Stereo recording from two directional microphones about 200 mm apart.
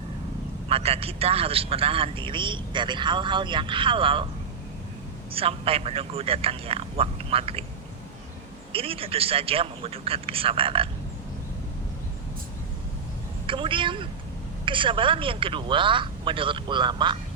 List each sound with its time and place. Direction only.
0.7 s a man's voice: 30° right (ahead or behind)
5.3 s a man's voice: 30° right (ahead or behind)
8.7 s a man's voice: 30° right (ahead or behind)
13.5 s a man's voice: 25° right (ahead or behind)